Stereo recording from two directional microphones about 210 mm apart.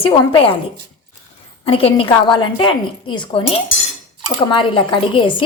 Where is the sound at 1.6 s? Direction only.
25° left (ahead or behind).